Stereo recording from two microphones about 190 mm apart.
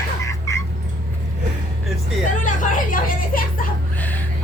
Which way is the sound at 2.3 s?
40° left (ahead or behind).